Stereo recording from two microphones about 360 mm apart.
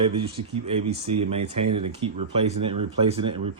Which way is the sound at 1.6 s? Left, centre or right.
Right.